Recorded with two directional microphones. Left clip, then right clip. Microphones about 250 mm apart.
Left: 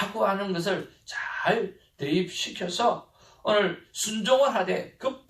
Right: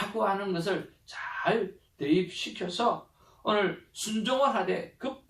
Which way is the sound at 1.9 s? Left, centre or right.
Left.